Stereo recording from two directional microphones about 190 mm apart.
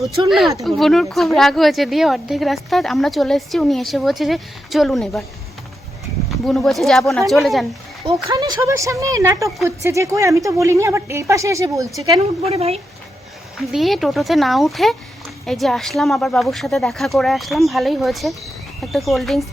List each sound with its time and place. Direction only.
0.3 s speech: centre (ahead or behind)
6.4 s speech: centre (ahead or behind)
8.0 s a woman's voice: 25° right (ahead or behind)
12.4 s speech: 35° right (ahead or behind)
13.7 s speech: centre (ahead or behind)